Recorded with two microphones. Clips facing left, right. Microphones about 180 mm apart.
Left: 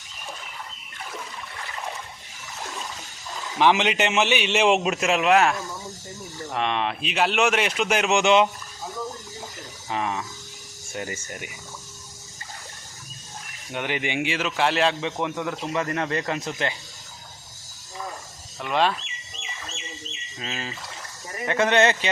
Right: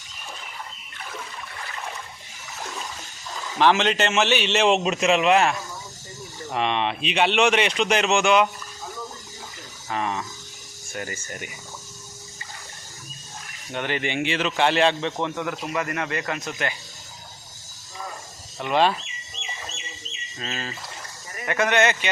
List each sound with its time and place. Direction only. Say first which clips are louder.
3.6 s a man's voice: right 1 dB; 15° left (ahead or behind)
8.2 s a man's voice: left 2 dB; 25° left (ahead or behind)
9.9 s a sound: even; 5° left (ahead or behind)
10.9 s a man's voice: left 1 dB; 20° left (ahead or behind)
13.7 s a man's voice: right 1 dB; 10° left (ahead or behind)
15.2 s a man's voice: even; 15° left (ahead or behind)
18.7 s speech: right 2 dB; centre (ahead or behind)
20.4 s a man's voice: right 1 dB; 10° left (ahead or behind)
21.4 s a man's voice: left 1 dB; 25° left (ahead or behind)